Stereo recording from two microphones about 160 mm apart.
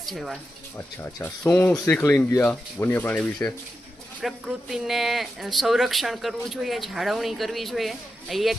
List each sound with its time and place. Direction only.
0.0 s speech: centre (ahead or behind)
1.2 s speech: 10° left (ahead or behind)
4.2 s speech: centre (ahead or behind)